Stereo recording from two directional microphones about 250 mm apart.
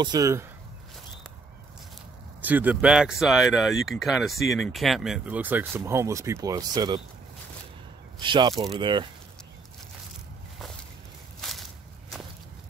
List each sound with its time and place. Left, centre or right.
0.0 s speech: centre
2.4 s speech: centre
8.2 s speech: centre
11.4 s walk: centre